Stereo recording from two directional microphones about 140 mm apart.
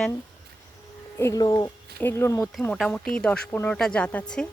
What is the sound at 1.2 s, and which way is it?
Speech, 25° left (ahead or behind).